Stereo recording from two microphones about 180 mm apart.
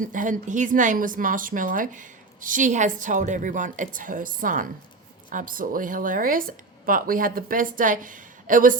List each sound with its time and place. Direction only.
0.0 s speech: 45° right (ahead or behind)